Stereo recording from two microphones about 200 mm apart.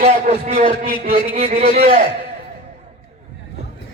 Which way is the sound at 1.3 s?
30° right (ahead or behind).